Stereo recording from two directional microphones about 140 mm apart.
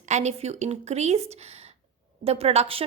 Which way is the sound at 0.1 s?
55° right (ahead or behind).